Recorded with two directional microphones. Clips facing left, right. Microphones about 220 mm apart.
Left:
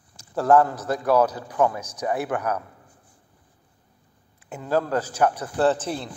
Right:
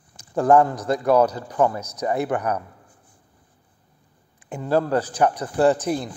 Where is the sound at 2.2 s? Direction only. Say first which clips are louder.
Right 3 dB; centre (ahead or behind).